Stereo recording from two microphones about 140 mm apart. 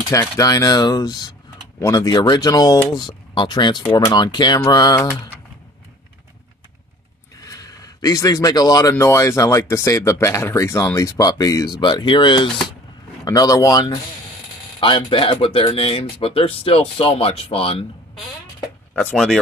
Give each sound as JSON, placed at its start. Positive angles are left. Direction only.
{"t": 0.1, "sound": "speech", "side_deg": 25}
{"t": 7.4, "sound": "a sound", "side_deg": 25}
{"t": 8.9, "sound": "speech", "side_deg": 20}
{"t": 14.8, "sound": "speech", "side_deg": 40}
{"t": 18.9, "sound": "speech", "side_deg": 5}